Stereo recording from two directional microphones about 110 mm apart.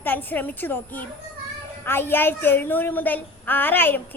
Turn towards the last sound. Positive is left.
turn(degrees=20)  # may be behind; listen again after turning